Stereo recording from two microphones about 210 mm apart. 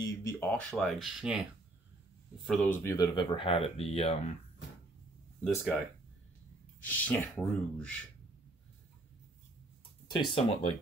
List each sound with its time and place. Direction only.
0.0 s speech: 10° left (ahead or behind); by 1.5 s 5° right (ahead or behind)
2.6 s speech: 10° left (ahead or behind); by 4.3 s 30° left (ahead or behind)
5.4 s speech: 5° left (ahead or behind)
6.8 s speech: 5° left (ahead or behind)
10.0 s speech: 25° left (ahead or behind)